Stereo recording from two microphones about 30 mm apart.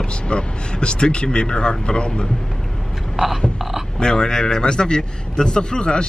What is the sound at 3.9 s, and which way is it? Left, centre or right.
A man's voice, left.